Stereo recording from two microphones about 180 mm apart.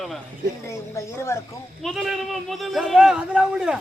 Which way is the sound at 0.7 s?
15° left (ahead or behind).